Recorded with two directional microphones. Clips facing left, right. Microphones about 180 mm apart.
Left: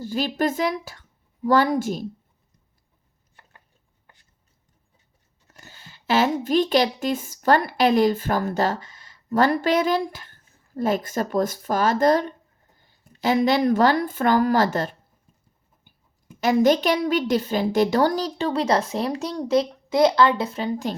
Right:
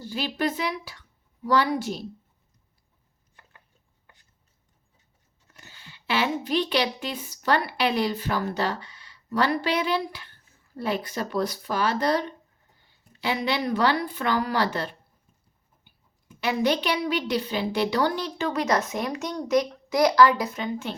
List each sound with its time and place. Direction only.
0.0 s a woman's voice: 45° left (ahead or behind)
5.5 s a woman's voice: 40° left (ahead or behind)
16.4 s a woman's voice: 45° left (ahead or behind)